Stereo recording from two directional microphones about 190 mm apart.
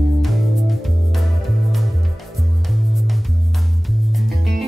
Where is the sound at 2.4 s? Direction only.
Centre (ahead or behind).